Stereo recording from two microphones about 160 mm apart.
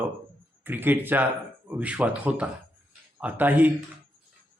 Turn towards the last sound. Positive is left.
turn(degrees=-10)  # may be behind; listen again after turning